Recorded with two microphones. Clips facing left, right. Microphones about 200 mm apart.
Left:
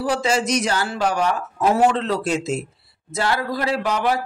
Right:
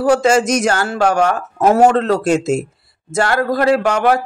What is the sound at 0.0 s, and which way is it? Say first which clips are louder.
Speech: right 8 dB; 45° right (ahead or behind).